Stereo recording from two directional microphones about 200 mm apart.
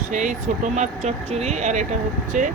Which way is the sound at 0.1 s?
40° right (ahead or behind).